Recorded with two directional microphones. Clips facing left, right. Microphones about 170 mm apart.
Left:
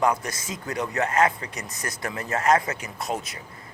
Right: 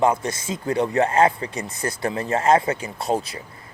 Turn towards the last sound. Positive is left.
turn(degrees=-30)  # may be behind; listen again after turning